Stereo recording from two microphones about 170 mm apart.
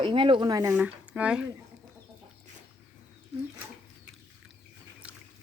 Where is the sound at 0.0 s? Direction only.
30° right (ahead or behind).